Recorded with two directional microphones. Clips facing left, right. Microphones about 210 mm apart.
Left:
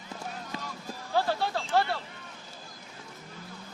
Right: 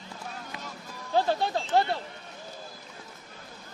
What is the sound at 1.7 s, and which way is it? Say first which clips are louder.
Speech: right 2 dB; 20° right (ahead or behind).